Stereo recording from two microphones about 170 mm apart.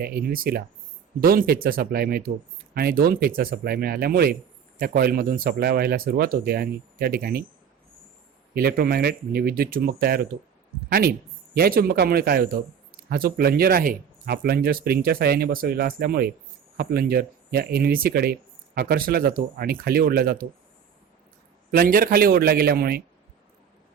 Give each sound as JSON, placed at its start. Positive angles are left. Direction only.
{"t": 0.0, "sound": "speech", "side_deg": -65}
{"t": 8.5, "sound": "speech", "side_deg": -65}
{"t": 21.7, "sound": "speech", "side_deg": -60}